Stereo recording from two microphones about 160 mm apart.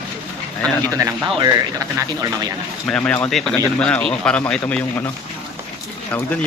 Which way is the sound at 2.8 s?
5° left (ahead or behind).